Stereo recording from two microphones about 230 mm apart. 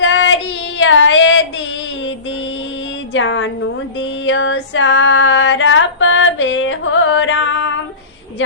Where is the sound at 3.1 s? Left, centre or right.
Left.